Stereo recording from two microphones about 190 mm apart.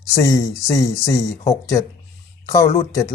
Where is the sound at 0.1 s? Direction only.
15° left (ahead or behind).